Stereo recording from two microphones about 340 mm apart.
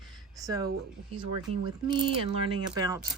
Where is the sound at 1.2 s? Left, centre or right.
Right.